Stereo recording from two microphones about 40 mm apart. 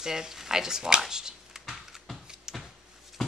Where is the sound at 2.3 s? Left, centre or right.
Centre.